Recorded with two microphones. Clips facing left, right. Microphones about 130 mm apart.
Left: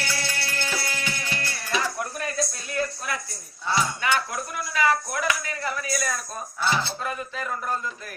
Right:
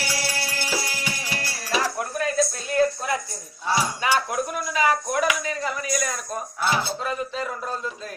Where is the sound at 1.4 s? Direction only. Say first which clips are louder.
Right 3 dB; 25° right (ahead or behind).